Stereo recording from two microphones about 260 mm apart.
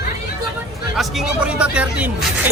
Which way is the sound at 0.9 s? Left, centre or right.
Centre.